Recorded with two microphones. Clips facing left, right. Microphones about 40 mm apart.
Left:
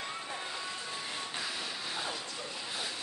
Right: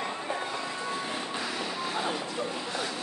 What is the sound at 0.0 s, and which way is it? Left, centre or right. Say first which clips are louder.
Music: right 7 dB; right.